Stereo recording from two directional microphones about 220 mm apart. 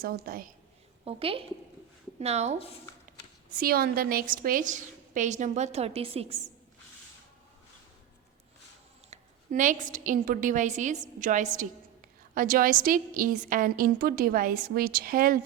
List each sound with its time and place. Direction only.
0.0 s a woman's voice: 45° right (ahead or behind)
1.0 s a woman's voice: 25° right (ahead or behind)
3.1 s speech: 40° right (ahead or behind); by 6.4 s 25° right (ahead or behind)
9.0 s a woman's voice: 35° right (ahead or behind)